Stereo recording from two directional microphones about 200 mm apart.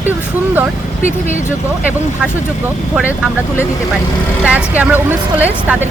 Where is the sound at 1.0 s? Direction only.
35° right (ahead or behind).